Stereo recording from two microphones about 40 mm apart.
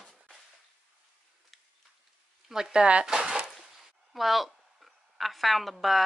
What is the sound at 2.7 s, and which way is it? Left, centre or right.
Speech, right.